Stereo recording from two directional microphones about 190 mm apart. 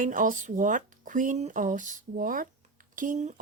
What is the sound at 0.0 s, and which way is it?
Speech, 45° right (ahead or behind).